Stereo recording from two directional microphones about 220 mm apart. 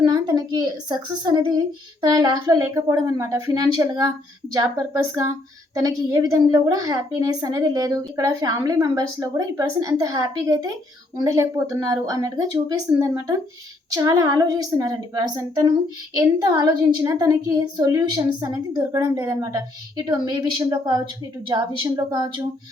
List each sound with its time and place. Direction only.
0.0 s a woman's voice: 20° right (ahead or behind)